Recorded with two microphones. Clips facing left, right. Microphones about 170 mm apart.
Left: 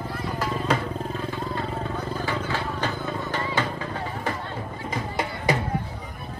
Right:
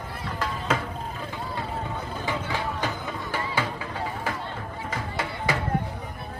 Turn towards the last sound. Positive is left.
turn(degrees=15)  # may be behind; listen again after turning